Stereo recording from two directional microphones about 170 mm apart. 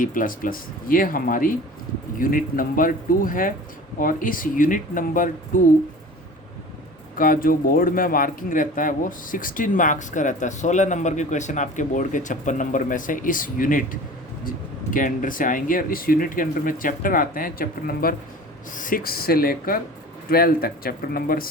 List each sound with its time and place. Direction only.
0.0 s speech: 55° left (ahead or behind)
7.2 s speech: 55° left (ahead or behind)